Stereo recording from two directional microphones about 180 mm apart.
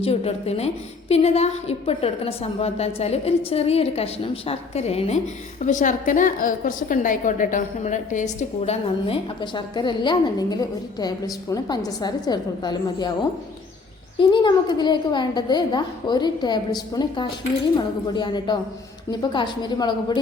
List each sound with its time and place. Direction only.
0.0 s a woman's voice: 35° left (ahead or behind)
14.2 s a woman's voice: 25° left (ahead or behind)